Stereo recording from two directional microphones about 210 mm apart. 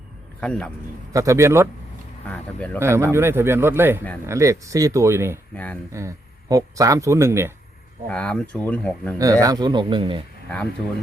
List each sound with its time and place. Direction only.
0.3 s speech: 5° left (ahead or behind)
1.1 s speech: 15° right (ahead or behind)
2.7 s speech: 15° right (ahead or behind)
8.1 s speech: 5° left (ahead or behind)
9.1 s speech: 15° right (ahead or behind)